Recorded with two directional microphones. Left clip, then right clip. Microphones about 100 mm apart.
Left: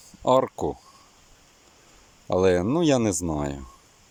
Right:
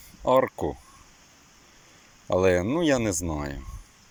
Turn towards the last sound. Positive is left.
turn(degrees=30)  # may be behind; listen again after turning